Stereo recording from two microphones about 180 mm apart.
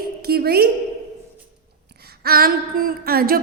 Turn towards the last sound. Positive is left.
turn(degrees=-55)  # may be behind; listen again after turning